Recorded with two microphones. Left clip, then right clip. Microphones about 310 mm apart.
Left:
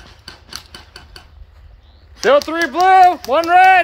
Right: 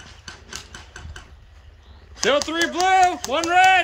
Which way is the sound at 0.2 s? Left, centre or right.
Left.